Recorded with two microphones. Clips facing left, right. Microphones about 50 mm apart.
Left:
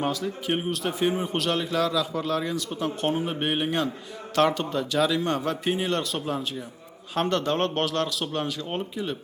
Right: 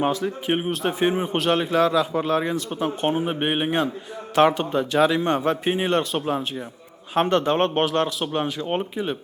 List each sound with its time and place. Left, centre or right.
0.0 s a man's voice: right